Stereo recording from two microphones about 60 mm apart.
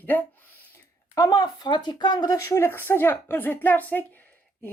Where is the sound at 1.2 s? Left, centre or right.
Left.